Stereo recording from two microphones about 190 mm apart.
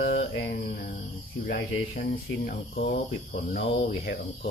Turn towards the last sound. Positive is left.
turn(degrees=55)  # may be behind; listen again after turning